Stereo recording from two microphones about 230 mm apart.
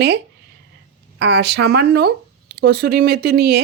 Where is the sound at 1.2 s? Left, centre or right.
Right.